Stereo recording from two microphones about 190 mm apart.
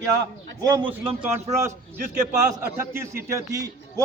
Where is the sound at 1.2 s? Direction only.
10° right (ahead or behind).